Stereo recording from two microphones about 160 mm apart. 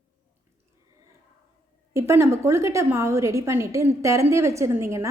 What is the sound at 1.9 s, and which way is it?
A woman's voice, 20° right (ahead or behind).